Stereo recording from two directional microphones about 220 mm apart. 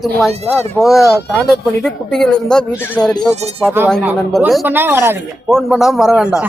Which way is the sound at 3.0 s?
15° left (ahead or behind).